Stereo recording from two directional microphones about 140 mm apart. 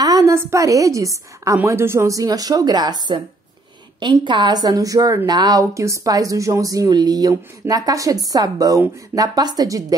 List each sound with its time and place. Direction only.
0.0 s a woman's voice: 25° right (ahead or behind)